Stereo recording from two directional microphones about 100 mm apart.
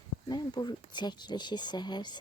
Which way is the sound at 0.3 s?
45° left (ahead or behind).